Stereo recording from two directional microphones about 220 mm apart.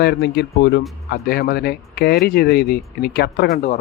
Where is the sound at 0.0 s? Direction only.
50° left (ahead or behind).